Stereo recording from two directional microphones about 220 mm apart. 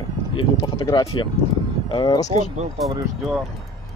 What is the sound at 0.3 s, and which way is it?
Speech, 25° left (ahead or behind).